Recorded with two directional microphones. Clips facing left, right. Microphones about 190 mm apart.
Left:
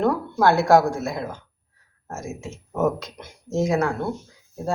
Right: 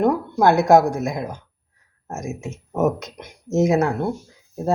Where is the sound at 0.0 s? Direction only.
20° right (ahead or behind).